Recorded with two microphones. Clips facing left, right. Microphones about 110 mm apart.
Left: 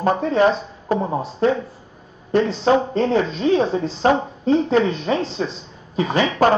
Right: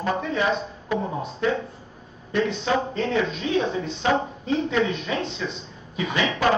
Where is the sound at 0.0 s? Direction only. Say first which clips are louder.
Left 8 dB; 35° left (ahead or behind).